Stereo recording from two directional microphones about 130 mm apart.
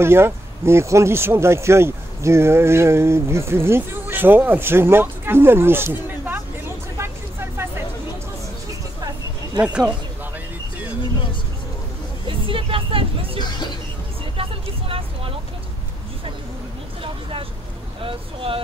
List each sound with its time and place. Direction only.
0.0 s speech: 20° right (ahead or behind)
7.0 s vehicle: 20° right (ahead or behind)
9.6 s speech: 10° right (ahead or behind)
12.3 s vehicle: 40° right (ahead or behind)
13.4 s hubbub: 35° left (ahead or behind)
14.9 s vehicle: 45° right (ahead or behind)
17.0 s vehicle: 45° right (ahead or behind)
18.0 s boat: 45° right (ahead or behind)